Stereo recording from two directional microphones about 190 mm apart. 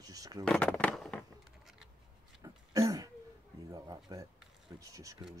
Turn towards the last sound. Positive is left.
turn(degrees=-15)  # may be behind; listen again after turning